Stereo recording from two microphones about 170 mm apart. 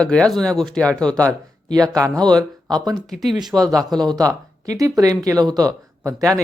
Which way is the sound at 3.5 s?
20° right (ahead or behind).